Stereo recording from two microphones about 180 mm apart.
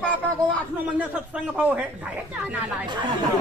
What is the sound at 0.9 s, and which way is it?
Speech, 10° right (ahead or behind).